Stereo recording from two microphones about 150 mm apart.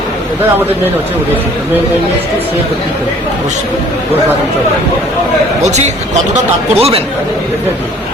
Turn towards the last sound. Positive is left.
turn(degrees=-40)  # may be behind; listen again after turning